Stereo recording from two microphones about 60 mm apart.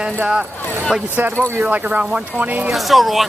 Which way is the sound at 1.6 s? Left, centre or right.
Right.